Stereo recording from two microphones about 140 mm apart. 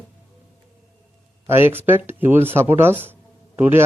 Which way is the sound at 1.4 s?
15° right (ahead or behind).